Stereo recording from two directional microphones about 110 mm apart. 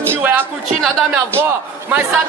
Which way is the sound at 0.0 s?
20° right (ahead or behind).